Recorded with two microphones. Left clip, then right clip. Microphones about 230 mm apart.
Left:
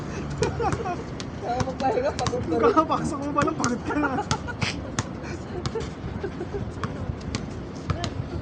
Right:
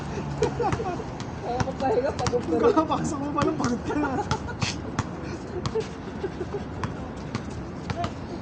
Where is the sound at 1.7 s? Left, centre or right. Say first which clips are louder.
Right 1 dB; left.